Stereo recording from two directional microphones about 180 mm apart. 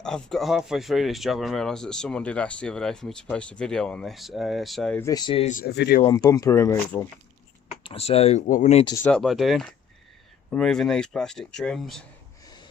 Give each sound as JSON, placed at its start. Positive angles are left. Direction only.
{"t": 0.0, "sound": "speech", "side_deg": 5}
{"t": 4.9, "sound": "speech", "side_deg": 20}
{"t": 5.5, "sound": "speech", "side_deg": 50}
{"t": 5.7, "sound": "speech", "side_deg": 65}
{"t": 6.1, "sound": "speech", "side_deg": 20}
{"t": 7.9, "sound": "speech", "side_deg": 35}
{"t": 9.0, "sound": "speech", "side_deg": 0}